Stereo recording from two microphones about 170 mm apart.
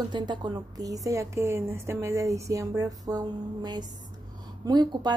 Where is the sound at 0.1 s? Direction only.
25° right (ahead or behind).